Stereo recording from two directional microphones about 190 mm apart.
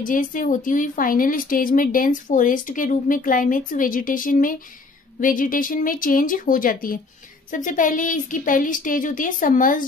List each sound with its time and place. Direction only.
0.0 s a woman's voice: 45° left (ahead or behind)